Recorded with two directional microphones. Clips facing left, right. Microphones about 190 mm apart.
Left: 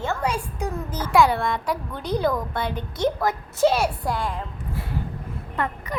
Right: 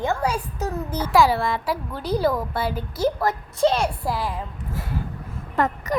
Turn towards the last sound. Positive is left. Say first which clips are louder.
# right 5 dB
turn(degrees=-45)  # may be behind; listen again after turning